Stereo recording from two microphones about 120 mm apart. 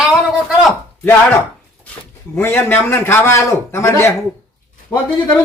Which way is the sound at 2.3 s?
15° left (ahead or behind).